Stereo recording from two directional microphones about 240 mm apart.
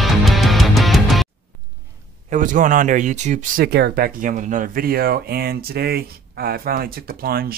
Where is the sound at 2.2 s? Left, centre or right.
Right.